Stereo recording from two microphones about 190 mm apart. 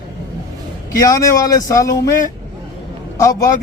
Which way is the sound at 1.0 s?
15° left (ahead or behind).